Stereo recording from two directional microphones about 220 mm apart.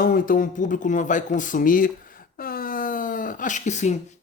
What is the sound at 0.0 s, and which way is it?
Speech, 40° left (ahead or behind).